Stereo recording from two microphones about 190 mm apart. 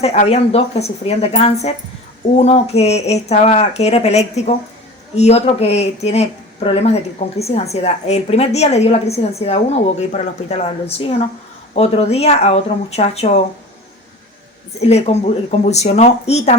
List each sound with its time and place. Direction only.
0.0 s speech: 35° left (ahead or behind)
14.8 s speech: 35° left (ahead or behind)